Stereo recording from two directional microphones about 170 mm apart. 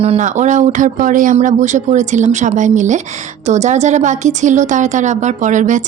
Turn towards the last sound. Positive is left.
turn(degrees=-45)  # may be behind; listen again after turning